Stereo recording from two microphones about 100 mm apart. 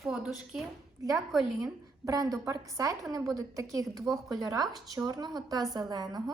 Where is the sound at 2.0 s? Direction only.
35° right (ahead or behind).